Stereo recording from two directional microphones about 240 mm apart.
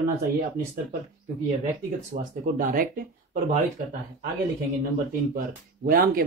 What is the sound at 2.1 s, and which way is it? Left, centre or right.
Speech, right.